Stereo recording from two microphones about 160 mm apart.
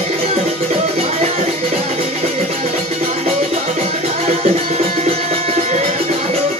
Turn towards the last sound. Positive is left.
turn(degrees=-40)  # may be behind; listen again after turning